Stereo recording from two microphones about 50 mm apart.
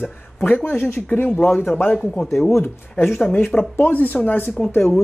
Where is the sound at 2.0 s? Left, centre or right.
Centre.